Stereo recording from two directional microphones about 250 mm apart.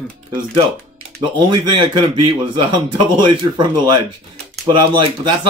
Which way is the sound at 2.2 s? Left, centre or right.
Centre.